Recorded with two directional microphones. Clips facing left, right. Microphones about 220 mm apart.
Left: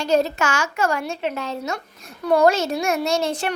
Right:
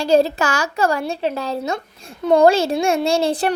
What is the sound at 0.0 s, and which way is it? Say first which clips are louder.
Speech: right 4 dB; 30° right (ahead or behind).